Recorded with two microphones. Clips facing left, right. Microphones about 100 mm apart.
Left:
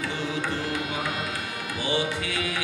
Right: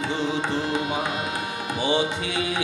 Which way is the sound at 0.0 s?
20° right (ahead or behind).